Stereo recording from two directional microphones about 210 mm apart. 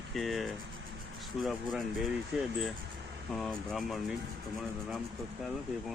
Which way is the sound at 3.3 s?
Centre (ahead or behind).